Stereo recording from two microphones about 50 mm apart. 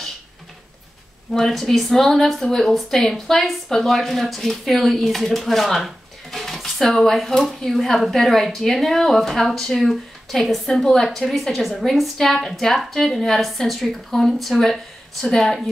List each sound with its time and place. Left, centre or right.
1.3 s speech: centre